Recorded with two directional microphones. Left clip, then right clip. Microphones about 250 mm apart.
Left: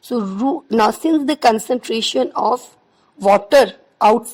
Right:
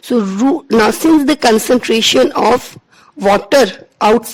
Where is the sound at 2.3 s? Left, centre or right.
Right.